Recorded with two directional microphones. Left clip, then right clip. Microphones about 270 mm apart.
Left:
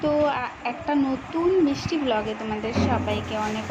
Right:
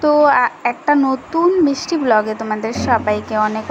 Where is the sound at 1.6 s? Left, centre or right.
Right.